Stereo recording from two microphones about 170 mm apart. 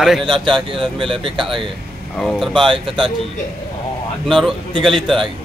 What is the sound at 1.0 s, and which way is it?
Speech, 30° right (ahead or behind).